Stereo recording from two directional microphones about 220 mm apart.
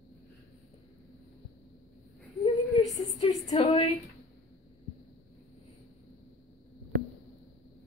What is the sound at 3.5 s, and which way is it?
Speech, 25° left (ahead or behind).